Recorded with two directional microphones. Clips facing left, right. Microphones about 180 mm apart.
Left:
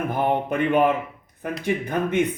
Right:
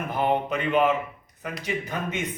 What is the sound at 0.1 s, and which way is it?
A man's voice, 55° left (ahead or behind).